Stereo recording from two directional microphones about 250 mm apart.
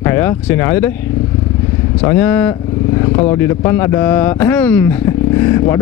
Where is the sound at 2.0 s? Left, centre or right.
Centre.